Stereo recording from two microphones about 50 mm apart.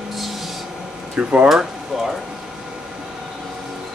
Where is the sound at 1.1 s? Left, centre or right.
Right.